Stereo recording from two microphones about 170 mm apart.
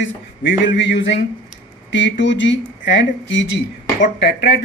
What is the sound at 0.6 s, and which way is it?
Speech, 90° left.